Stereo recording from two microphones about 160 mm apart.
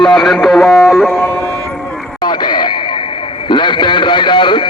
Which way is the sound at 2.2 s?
25° left (ahead or behind).